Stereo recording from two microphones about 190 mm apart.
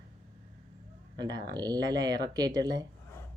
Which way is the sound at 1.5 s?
20° right (ahead or behind).